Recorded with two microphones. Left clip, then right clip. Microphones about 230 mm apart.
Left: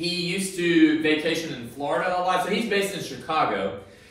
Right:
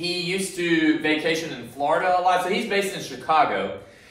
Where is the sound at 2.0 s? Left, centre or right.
Left.